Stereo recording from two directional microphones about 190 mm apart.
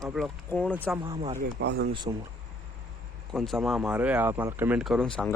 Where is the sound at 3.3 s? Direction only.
Centre (ahead or behind).